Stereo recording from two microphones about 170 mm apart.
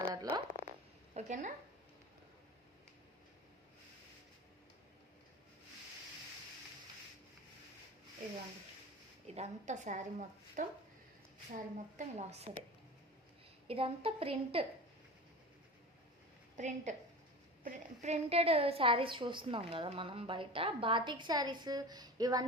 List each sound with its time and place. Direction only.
0.0 s frog: 25° right (ahead or behind)
1.1 s a woman's voice: 45° right (ahead or behind)
9.2 s a woman's voice: 40° right (ahead or behind)
13.7 s a woman's voice: 35° right (ahead or behind)
16.6 s a woman's voice: 45° right (ahead or behind); by 22.4 s 20° right (ahead or behind)